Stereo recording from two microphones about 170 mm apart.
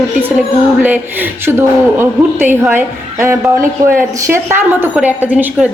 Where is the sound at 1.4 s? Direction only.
15° right (ahead or behind).